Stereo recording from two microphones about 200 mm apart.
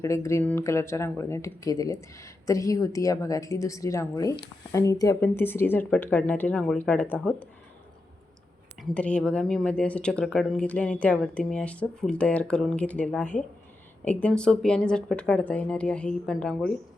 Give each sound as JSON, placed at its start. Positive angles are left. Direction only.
{"t": 0.0, "sound": "speech", "side_deg": 15}
{"t": 8.8, "sound": "speech", "side_deg": 5}